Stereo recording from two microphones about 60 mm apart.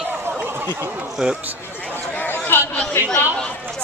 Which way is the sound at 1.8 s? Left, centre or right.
Left.